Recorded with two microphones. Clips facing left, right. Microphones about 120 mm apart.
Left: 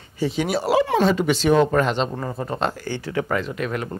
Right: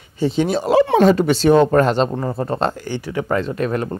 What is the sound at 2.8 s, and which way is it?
Speech, 20° right (ahead or behind).